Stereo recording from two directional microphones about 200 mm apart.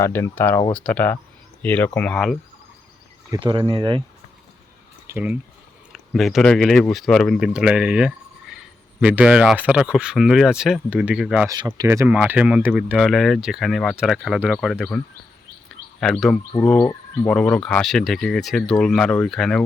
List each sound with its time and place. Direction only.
0.0 s speech: 10° left (ahead or behind)
3.3 s speech: 20° right (ahead or behind)
5.0 s speech: 10° right (ahead or behind)
11.4 s speech: 20° right (ahead or behind); by 15.0 s centre (ahead or behind)
15.7 s a sound: centre (ahead or behind)
16.6 s speech: centre (ahead or behind)